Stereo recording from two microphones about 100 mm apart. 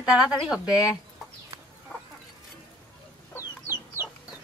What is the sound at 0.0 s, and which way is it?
Speech, 10° right (ahead or behind).